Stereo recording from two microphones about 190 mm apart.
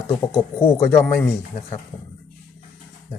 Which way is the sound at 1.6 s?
30° left (ahead or behind).